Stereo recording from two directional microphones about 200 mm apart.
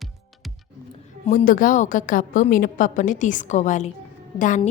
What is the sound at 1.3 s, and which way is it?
A woman's voice, 40° left (ahead or behind).